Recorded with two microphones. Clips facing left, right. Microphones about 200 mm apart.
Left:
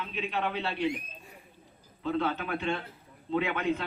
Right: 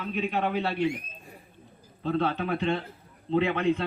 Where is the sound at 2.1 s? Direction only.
35° right (ahead or behind).